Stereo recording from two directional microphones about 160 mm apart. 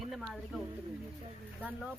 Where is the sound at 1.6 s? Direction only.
10° right (ahead or behind).